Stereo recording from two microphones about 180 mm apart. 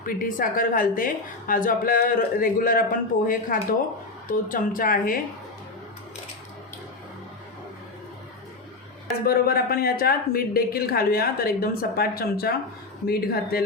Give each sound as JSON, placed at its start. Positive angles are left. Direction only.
{"t": 0.0, "sound": "a woman's voice", "side_deg": 50}
{"t": 9.2, "sound": "a woman's voice", "side_deg": 55}